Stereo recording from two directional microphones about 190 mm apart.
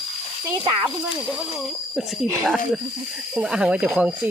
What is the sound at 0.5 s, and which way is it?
Speech, 25° right (ahead or behind).